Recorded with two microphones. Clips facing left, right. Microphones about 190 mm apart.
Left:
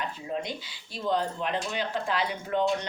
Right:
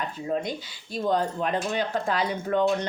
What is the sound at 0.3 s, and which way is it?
Speech, 45° right (ahead or behind).